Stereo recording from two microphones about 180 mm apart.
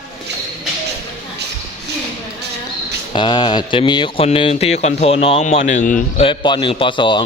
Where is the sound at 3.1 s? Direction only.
25° left (ahead or behind); by 6.2 s 45° left (ahead or behind).